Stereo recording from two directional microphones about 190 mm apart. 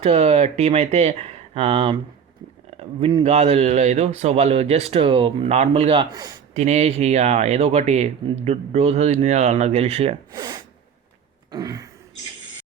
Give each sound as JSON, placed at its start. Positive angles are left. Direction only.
{"t": 0.0, "sound": "speech", "side_deg": -35}
{"t": 6.5, "sound": "speech", "side_deg": -35}
{"t": 10.3, "sound": "throat clearing", "side_deg": -20}